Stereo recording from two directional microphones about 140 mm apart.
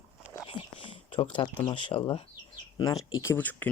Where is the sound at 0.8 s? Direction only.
40° left (ahead or behind).